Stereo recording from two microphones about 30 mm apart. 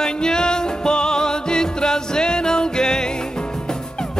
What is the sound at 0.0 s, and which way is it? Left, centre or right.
Music, left.